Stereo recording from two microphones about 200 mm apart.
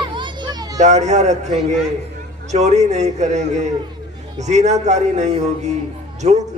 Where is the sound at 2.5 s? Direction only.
35° right (ahead or behind).